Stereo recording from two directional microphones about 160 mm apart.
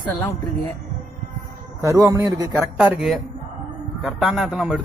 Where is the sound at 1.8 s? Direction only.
20° right (ahead or behind).